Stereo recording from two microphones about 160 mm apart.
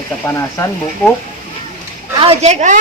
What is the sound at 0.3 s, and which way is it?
Speech, 20° left (ahead or behind).